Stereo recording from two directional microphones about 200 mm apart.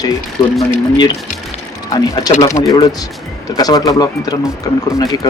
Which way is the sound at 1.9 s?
15° left (ahead or behind).